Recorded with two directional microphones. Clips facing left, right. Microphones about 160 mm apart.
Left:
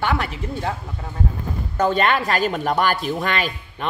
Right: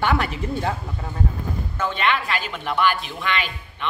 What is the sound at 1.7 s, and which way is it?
Speech, 40° left (ahead or behind).